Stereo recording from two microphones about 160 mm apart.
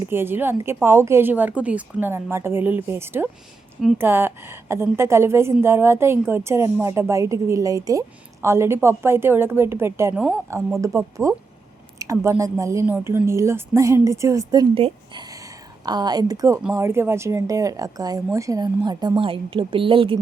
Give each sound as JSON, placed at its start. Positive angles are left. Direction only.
{"t": 0.1, "sound": "a woman's voice", "side_deg": -15}
{"t": 14.8, "sound": "speech", "side_deg": -35}
{"t": 15.9, "sound": "a woman's voice", "side_deg": -25}